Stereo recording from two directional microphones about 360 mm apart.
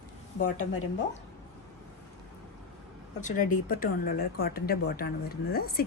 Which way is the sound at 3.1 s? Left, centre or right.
Left.